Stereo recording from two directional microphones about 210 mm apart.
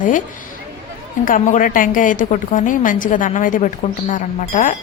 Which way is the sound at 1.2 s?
40° left (ahead or behind).